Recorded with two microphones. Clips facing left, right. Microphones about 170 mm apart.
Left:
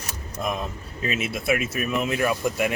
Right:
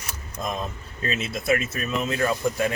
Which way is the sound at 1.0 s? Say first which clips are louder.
Even; 10° left (ahead or behind).